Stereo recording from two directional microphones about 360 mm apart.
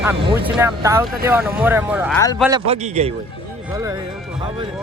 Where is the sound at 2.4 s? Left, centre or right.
Centre.